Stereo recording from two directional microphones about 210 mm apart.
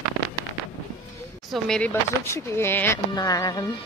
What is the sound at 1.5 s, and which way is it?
Speech, 5° left (ahead or behind).